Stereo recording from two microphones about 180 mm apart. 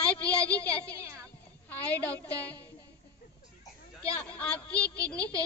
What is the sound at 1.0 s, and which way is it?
Speech, 15° right (ahead or behind).